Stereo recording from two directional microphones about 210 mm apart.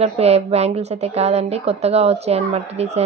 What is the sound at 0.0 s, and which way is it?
A woman's voice, 30° right (ahead or behind).